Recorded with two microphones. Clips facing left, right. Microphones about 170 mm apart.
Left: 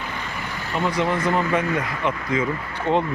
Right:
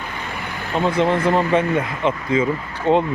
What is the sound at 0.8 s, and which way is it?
Speech, 25° right (ahead or behind).